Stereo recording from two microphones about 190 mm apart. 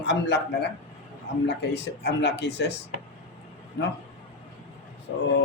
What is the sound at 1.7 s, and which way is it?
Mantra, 60° left (ahead or behind).